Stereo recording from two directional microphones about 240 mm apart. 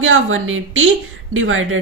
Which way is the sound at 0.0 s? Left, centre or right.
Right.